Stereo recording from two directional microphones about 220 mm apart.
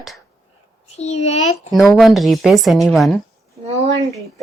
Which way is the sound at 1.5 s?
Centre (ahead or behind).